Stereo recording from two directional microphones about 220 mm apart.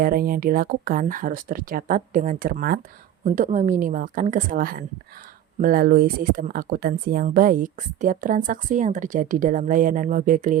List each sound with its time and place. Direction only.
0.0 s speech: 40° right (ahead or behind)